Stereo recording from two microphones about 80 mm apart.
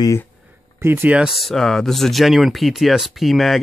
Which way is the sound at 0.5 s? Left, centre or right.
Right.